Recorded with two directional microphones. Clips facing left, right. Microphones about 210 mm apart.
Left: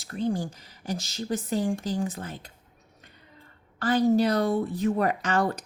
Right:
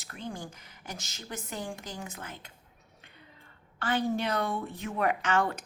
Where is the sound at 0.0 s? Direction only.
35° left (ahead or behind).